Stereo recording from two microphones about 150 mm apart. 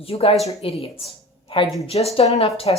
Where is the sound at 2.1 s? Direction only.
40° left (ahead or behind).